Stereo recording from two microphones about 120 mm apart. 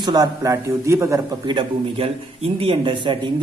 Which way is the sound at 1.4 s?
45° right (ahead or behind).